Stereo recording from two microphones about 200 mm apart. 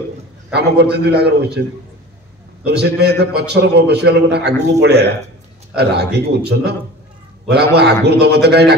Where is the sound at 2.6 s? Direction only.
55° right (ahead or behind).